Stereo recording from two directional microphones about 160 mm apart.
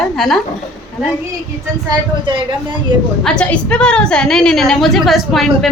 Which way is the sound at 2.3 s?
30° right (ahead or behind).